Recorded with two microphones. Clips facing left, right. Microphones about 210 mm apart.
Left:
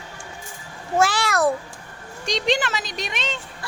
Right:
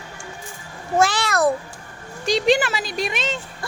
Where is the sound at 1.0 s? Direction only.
10° left (ahead or behind).